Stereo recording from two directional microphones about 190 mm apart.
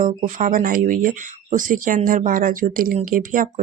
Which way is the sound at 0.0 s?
45° right (ahead or behind).